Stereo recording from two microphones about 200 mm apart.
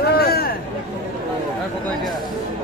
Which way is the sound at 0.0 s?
50° left (ahead or behind).